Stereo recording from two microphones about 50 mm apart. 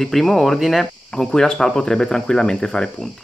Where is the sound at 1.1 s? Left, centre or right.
Centre.